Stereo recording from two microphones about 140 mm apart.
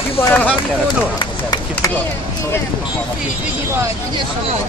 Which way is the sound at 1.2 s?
30° left (ahead or behind).